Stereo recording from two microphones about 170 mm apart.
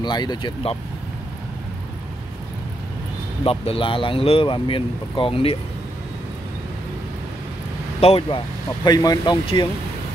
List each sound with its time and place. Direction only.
0.0 s speech: 25° left (ahead or behind)
3.4 s speech: 35° left (ahead or behind)
8.0 s speech: 35° left (ahead or behind)
8.8 s speech: 25° left (ahead or behind)